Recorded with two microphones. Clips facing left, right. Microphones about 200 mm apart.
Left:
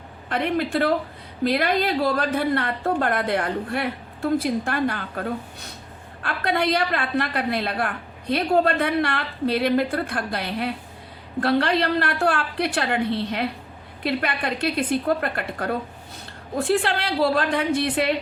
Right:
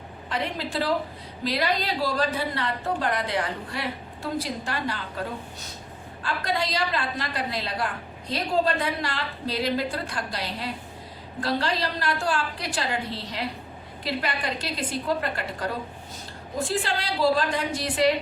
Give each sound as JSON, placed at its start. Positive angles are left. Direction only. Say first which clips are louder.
{"t": 0.3, "sound": "a woman's voice", "louder": "left 7 dB", "side_deg": 55}